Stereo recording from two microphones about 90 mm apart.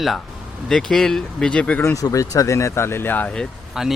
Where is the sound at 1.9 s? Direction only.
40° left (ahead or behind); by 3.4 s 20° left (ahead or behind).